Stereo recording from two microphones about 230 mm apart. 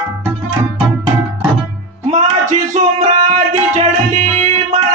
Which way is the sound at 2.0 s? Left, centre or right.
Right.